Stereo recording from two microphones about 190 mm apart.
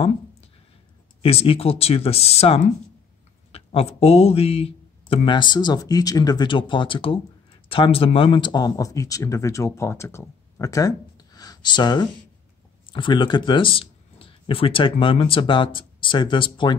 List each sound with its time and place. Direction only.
1.2 s speech: 30° left (ahead or behind)